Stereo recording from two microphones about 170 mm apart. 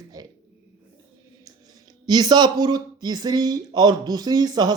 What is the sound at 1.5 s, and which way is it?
Speech, 25° right (ahead or behind).